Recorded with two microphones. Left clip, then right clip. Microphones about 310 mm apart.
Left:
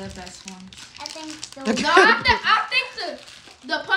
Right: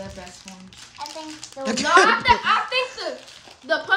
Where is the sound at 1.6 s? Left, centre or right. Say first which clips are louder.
Left 1 dB; centre.